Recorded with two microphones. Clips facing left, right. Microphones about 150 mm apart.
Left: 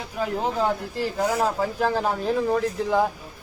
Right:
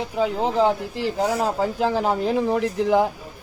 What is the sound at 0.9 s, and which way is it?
A man's voice, 15° right (ahead or behind).